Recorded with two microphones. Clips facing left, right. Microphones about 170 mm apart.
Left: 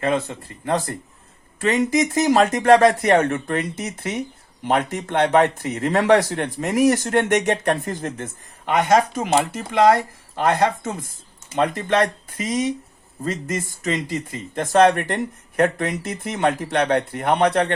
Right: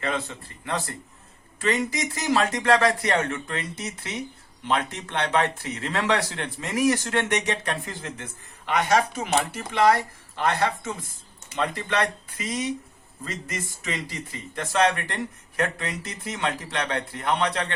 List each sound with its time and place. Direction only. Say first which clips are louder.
0.0 s speech: left 7 dB; 50° left (ahead or behind)